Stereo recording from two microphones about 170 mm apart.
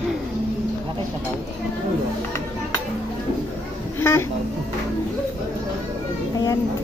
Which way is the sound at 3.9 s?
15° left (ahead or behind).